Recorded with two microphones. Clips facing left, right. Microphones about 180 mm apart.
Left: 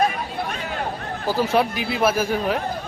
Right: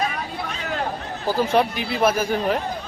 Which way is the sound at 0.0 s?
50° left (ahead or behind).